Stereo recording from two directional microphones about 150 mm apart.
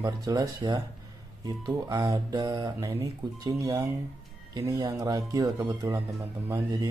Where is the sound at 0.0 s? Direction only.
25° right (ahead or behind).